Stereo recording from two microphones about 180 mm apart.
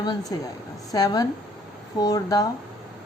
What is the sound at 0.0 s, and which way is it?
Speech, 25° left (ahead or behind).